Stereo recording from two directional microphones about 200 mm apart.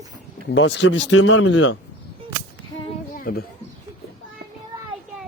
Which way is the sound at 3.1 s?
45° left (ahead or behind).